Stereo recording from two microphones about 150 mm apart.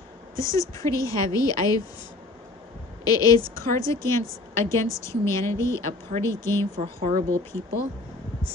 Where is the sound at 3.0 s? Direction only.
25° left (ahead or behind).